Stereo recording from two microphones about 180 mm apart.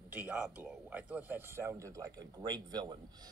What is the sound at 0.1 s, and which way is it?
Speech, 10° right (ahead or behind).